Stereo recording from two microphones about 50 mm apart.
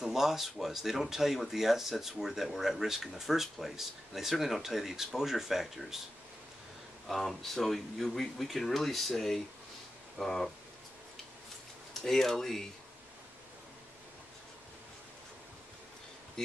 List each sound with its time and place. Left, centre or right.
0.0 s speech: centre
7.1 s speech: centre
11.9 s speech: centre
16.4 s speech: centre